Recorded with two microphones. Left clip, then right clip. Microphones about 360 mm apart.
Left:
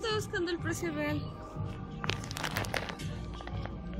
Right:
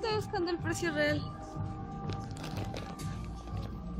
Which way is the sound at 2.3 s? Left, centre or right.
Centre.